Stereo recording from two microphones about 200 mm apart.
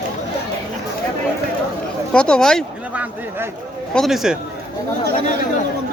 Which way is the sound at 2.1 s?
5° left (ahead or behind).